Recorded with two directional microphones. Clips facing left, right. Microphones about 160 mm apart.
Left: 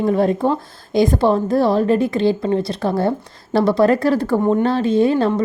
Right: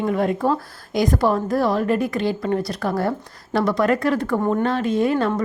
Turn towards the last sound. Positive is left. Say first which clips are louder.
# left 4 dB
turn(degrees=25)  # may be behind; listen again after turning